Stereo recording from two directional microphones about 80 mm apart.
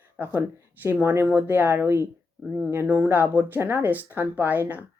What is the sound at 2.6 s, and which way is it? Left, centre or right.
Speech, right.